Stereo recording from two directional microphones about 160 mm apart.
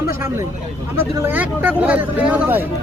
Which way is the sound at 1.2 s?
10° right (ahead or behind).